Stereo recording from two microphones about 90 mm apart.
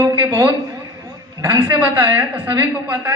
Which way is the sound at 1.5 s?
60° right (ahead or behind).